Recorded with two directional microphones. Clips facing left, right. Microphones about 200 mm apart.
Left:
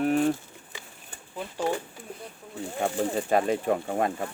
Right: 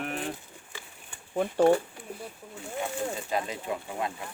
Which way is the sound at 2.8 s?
55° left (ahead or behind).